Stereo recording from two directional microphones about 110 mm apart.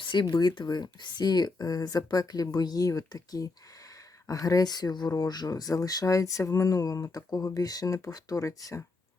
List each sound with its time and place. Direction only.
0.0 s speech: 45° left (ahead or behind); by 8.8 s 30° left (ahead or behind)